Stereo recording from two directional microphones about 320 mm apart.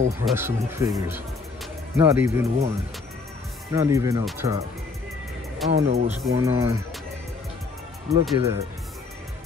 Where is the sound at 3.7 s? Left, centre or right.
Centre.